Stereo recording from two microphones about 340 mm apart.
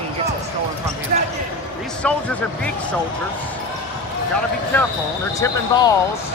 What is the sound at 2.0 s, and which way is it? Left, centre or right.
Speech, centre.